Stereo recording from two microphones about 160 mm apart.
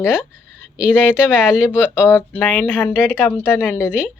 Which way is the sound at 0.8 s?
5° right (ahead or behind).